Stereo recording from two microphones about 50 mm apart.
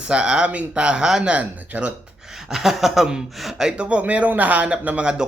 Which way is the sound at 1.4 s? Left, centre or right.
Right.